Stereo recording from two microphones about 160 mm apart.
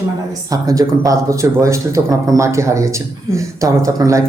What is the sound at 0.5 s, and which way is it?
Speech, 20° right (ahead or behind).